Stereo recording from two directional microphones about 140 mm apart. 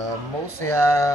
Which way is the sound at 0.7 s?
20° left (ahead or behind).